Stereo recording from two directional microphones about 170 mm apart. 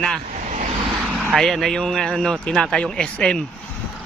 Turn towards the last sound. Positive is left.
turn(degrees=5)  # may be behind; listen again after turning